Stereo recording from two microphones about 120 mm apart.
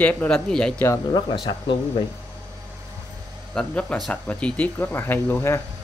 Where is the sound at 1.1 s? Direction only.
40° left (ahead or behind).